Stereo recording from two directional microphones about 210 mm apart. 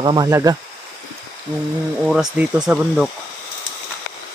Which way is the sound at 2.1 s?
5° right (ahead or behind).